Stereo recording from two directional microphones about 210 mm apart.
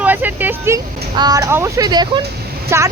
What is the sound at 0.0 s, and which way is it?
Speech, 10° right (ahead or behind).